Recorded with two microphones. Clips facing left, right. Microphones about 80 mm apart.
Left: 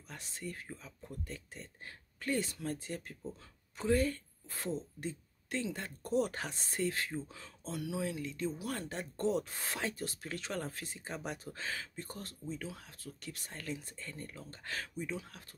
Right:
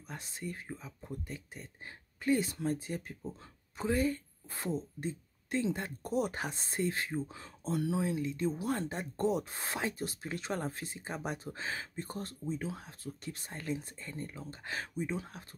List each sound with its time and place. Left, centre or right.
0.1 s speech: right